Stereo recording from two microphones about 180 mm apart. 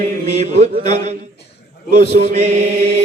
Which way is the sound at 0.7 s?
45° right (ahead or behind).